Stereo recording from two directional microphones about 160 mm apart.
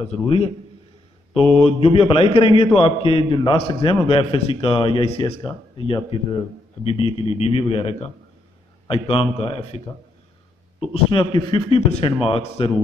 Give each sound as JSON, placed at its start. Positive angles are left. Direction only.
{"t": 0.0, "sound": "a man's voice", "side_deg": 40}
{"t": 1.4, "sound": "mantra", "side_deg": 0}
{"t": 1.7, "sound": "a man's voice", "side_deg": 35}
{"t": 10.9, "sound": "a man's voice", "side_deg": 30}